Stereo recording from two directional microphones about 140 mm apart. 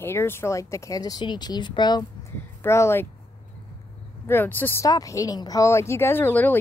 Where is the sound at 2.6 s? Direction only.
20° left (ahead or behind).